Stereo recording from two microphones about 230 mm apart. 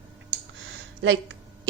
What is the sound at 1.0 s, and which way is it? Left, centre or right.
Speech, right.